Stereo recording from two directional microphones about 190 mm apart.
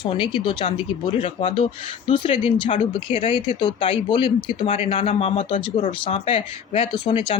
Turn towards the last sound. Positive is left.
turn(degrees=25)  # may be behind; listen again after turning